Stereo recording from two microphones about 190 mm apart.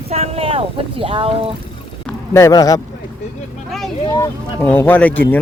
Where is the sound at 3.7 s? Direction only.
Centre (ahead or behind).